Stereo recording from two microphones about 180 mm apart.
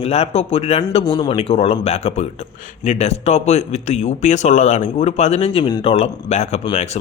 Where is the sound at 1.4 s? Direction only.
35° left (ahead or behind).